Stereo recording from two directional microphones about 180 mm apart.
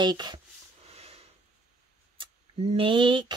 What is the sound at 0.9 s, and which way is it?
Snort, 35° right (ahead or behind).